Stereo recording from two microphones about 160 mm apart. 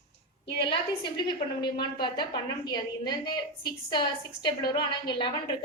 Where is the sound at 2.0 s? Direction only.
30° left (ahead or behind).